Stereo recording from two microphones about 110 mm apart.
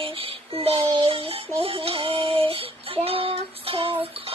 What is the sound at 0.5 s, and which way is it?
Child singing, 60° right (ahead or behind).